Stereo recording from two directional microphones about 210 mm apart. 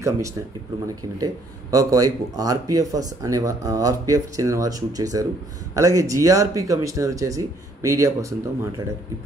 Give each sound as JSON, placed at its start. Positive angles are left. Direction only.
{"t": 0.8, "sound": "speech", "side_deg": -15}